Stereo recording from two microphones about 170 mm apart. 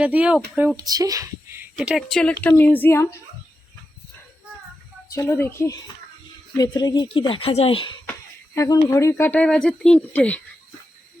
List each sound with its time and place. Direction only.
0.0 s speech: 10° right (ahead or behind)
0.8 s speech: 20° right (ahead or behind)
1.7 s speech: 5° right (ahead or behind); by 3.2 s 15° left (ahead or behind)
5.1 s speech: 15° left (ahead or behind); by 7.8 s 35° left (ahead or behind)
8.5 s speech: 20° left (ahead or behind)